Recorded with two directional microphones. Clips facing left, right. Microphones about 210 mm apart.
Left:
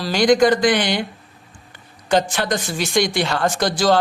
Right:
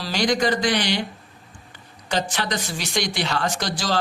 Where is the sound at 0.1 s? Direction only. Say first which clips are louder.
Left 7 dB; 50° left (ahead or behind).